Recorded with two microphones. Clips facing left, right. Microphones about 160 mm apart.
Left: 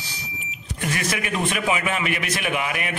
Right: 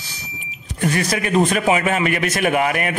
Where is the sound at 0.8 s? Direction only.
40° right (ahead or behind).